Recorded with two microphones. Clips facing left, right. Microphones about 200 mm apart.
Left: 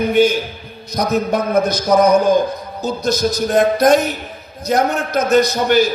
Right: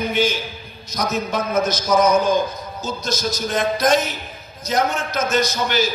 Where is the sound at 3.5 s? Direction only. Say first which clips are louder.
Left 6 dB; 60° left (ahead or behind).